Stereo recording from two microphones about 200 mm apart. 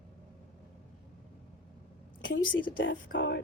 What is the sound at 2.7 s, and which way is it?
Speech, 70° left (ahead or behind).